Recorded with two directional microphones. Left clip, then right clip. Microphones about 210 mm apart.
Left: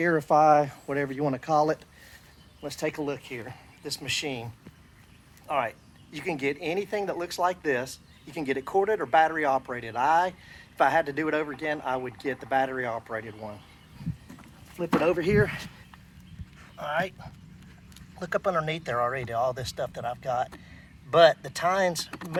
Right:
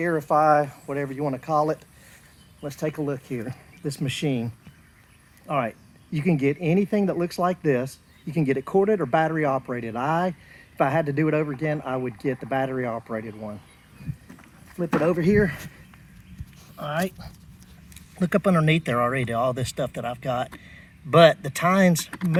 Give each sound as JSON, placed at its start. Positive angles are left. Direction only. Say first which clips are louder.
{"t": 0.0, "sound": "speech", "louder": "right 1 dB", "side_deg": 0}
{"t": 15.0, "sound": "speech", "louder": "right 3 dB", "side_deg": 15}
{"t": 16.7, "sound": "speech", "louder": "right 1 dB", "side_deg": 20}